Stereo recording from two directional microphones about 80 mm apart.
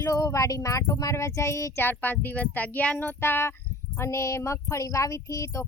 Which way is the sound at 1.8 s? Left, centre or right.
Left.